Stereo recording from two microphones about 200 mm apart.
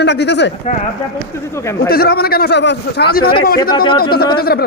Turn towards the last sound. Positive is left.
turn(degrees=50)  # may be behind; listen again after turning